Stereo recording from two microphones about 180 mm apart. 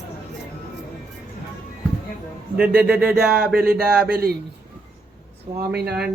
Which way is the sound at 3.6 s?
60° right (ahead or behind).